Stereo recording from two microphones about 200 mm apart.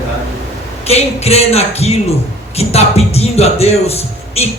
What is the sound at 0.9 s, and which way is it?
A man's voice, 30° left (ahead or behind).